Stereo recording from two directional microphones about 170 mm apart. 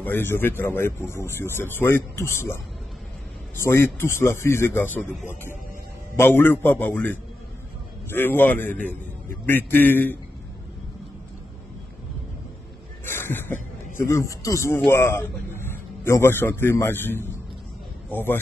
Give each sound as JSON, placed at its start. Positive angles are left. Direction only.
{"t": 0.0, "sound": "a man's voice", "side_deg": 10}
{"t": 6.1, "sound": "a man's voice", "side_deg": 15}
{"t": 13.0, "sound": "a sound", "side_deg": 15}
{"t": 13.9, "sound": "a man's voice", "side_deg": 15}